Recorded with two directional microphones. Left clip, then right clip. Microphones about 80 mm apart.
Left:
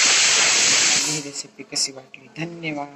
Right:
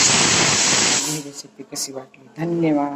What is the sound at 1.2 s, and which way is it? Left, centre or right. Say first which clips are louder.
Speech: left 2 dB; right.